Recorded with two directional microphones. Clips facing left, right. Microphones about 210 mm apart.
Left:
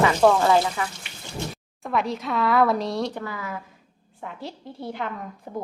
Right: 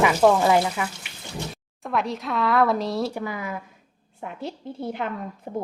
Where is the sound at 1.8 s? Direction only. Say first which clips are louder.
Left 1 dB; centre (ahead or behind); by 5.6 s 25° right (ahead or behind).